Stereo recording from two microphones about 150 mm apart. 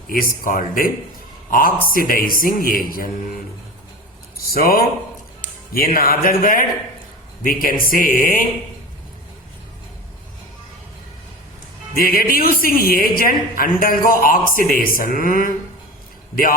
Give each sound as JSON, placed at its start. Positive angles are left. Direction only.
{"t": 0.1, "sound": "a woman's voice", "side_deg": 70}
{"t": 4.4, "sound": "a woman's voice", "side_deg": 80}
{"t": 11.9, "sound": "a woman's voice", "side_deg": 75}